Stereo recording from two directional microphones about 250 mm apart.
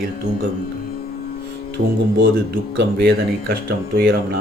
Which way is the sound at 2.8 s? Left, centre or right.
Right.